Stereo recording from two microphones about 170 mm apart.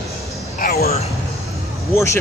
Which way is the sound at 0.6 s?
65° left (ahead or behind).